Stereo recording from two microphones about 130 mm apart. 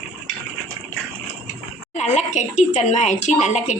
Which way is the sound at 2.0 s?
60° left (ahead or behind).